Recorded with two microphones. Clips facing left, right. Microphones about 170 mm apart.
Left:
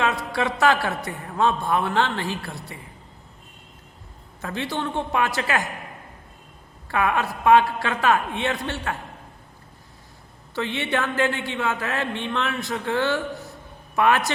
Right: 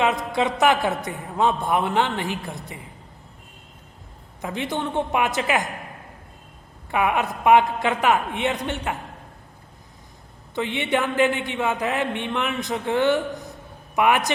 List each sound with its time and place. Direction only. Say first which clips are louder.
0.0 s a woman's voice: right 2 dB; 20° right (ahead or behind)
4.4 s a woman's voice: right 1 dB; 20° right (ahead or behind)
6.9 s a woman's voice: right 1 dB; 15° right (ahead or behind)
10.5 s a woman's voice: right 2 dB; 20° right (ahead or behind)